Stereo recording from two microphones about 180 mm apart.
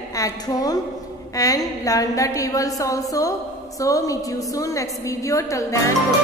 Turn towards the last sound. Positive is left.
turn(degrees=15)  # may be behind; listen again after turning